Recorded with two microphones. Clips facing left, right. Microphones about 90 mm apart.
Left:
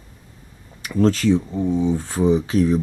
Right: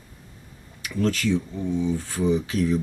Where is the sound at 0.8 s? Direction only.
35° left (ahead or behind).